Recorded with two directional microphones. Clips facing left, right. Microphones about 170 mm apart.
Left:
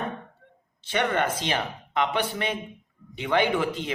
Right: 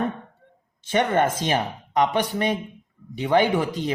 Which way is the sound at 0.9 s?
45° right (ahead or behind).